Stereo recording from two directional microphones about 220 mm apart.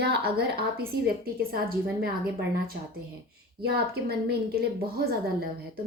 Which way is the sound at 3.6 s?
45° right (ahead or behind).